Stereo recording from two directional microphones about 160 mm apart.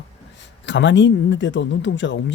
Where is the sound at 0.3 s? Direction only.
90° left.